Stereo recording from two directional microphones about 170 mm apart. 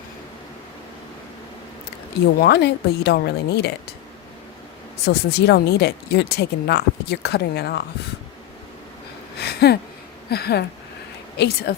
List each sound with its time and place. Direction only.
2.4 s speech: 75° left (ahead or behind)
5.0 s speech: 70° left (ahead or behind)
9.4 s a sound: 70° left (ahead or behind)
10.2 s speech: 70° left (ahead or behind)